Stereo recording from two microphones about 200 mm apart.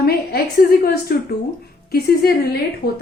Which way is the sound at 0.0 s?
50° left (ahead or behind).